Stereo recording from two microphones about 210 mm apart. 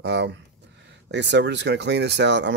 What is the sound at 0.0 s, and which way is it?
Speech, 55° right (ahead or behind).